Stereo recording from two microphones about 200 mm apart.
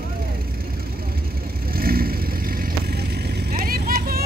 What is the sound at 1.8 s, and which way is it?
Vehicle, 50° right (ahead or behind).